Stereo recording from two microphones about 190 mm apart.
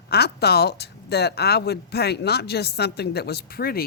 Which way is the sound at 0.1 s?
55° left (ahead or behind).